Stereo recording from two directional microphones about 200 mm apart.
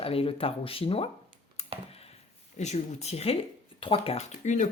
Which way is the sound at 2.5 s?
35° left (ahead or behind).